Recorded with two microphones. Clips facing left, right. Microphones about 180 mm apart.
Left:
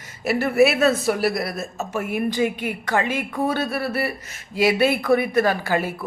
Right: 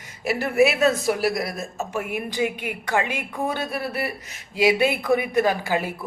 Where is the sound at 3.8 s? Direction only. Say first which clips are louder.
Left 3 dB; centre (ahead or behind).